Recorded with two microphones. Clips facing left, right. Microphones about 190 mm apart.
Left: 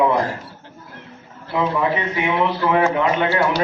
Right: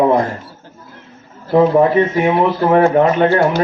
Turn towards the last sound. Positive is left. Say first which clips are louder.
# right 6 dB
turn(degrees=-45)  # may be behind; listen again after turning